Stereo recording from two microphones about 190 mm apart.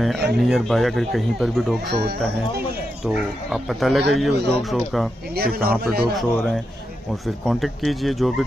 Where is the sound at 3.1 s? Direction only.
Centre (ahead or behind).